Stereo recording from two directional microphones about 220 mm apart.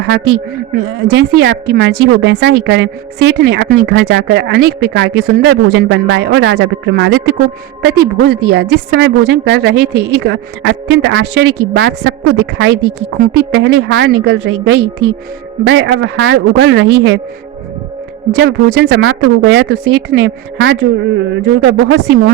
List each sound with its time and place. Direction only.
0.0 s speech: 45° right (ahead or behind)
13.5 s speech: 55° right (ahead or behind)
18.3 s speech: 50° right (ahead or behind)